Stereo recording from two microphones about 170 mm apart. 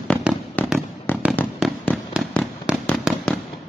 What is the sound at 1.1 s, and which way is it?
Fireworks, 10° left (ahead or behind).